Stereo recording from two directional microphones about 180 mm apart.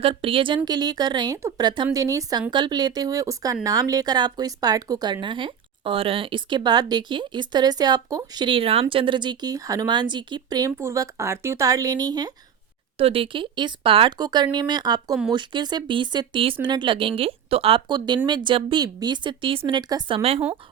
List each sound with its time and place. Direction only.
0.0 s speech: 30° right (ahead or behind)